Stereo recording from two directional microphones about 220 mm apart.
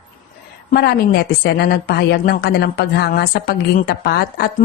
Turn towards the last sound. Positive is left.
turn(degrees=45)  # may be behind; listen again after turning